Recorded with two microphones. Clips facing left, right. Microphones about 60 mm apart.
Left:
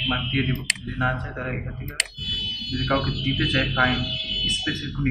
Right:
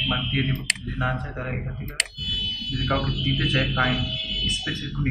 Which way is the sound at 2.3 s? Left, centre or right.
Left.